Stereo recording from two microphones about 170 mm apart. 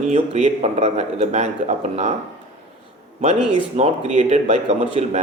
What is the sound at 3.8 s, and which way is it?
Speech, 40° right (ahead or behind).